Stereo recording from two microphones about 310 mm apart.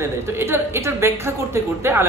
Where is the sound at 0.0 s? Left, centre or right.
Centre.